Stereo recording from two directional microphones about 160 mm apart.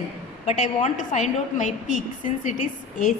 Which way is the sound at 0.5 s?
50° left (ahead or behind).